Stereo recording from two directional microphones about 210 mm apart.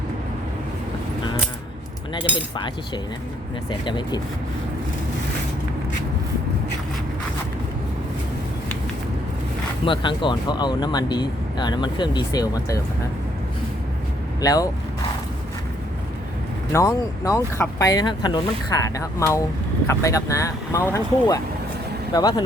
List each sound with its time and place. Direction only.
2.1 s speech: 20° left (ahead or behind)
9.8 s speech: 25° left (ahead or behind)
14.4 s speech: 15° left (ahead or behind)
16.7 s speech: 15° left (ahead or behind)